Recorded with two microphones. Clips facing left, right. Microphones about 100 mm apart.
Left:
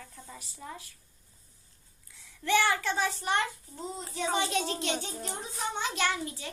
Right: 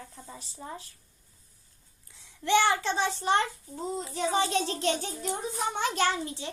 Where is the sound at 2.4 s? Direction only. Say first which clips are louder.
Right 3 dB; 25° right (ahead or behind).